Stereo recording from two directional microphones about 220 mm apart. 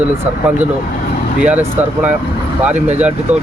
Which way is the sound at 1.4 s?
5° right (ahead or behind).